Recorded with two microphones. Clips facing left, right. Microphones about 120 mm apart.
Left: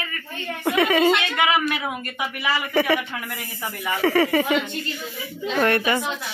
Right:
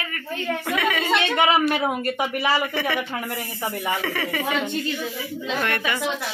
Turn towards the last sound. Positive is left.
turn(degrees=35)  # may be behind; listen again after turning